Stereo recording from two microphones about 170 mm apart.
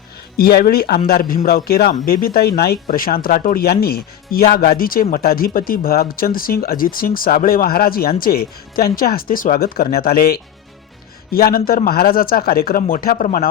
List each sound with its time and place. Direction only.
0.3 s speech: 65° left (ahead or behind)